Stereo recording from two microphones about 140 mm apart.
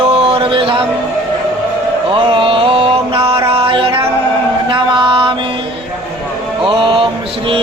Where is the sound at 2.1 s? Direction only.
40° right (ahead or behind).